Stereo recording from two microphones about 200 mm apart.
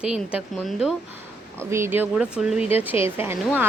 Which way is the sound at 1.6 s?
15° right (ahead or behind).